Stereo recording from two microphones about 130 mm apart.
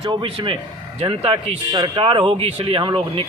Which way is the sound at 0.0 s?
35° right (ahead or behind).